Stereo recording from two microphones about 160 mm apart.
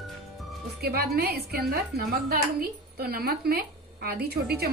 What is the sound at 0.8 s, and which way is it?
A woman's voice, 75° right (ahead or behind).